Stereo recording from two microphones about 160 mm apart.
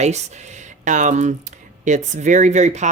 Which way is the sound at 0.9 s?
50° right (ahead or behind).